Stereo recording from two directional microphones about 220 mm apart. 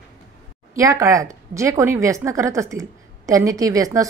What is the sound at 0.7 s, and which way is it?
Speech, 15° right (ahead or behind).